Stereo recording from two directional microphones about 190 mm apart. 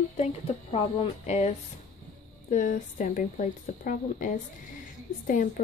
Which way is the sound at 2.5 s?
45° left (ahead or behind).